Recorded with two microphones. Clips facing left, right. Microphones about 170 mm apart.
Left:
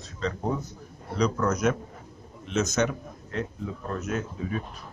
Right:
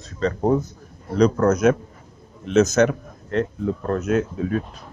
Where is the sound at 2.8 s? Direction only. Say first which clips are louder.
Right 8 dB; 70° right (ahead or behind); by 4.0 s 55° right (ahead or behind).